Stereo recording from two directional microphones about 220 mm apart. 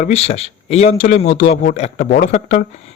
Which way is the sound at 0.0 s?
30° left (ahead or behind).